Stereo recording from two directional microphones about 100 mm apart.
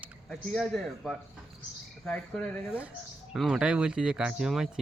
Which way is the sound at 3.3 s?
5° right (ahead or behind).